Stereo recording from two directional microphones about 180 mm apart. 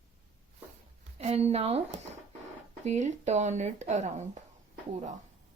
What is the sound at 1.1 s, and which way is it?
Speech, 35° right (ahead or behind).